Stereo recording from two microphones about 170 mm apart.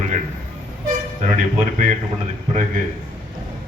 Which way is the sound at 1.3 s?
50° right (ahead or behind).